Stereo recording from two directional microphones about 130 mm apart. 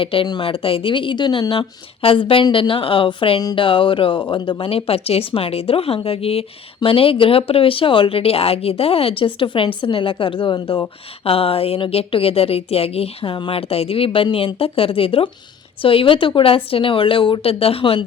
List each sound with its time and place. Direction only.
0.0 s a woman's voice: 45° left (ahead or behind)